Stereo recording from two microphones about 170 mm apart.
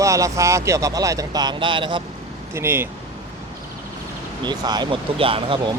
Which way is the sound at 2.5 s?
15° right (ahead or behind).